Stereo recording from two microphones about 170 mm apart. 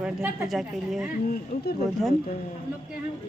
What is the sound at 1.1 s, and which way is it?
Speech, 65° left (ahead or behind).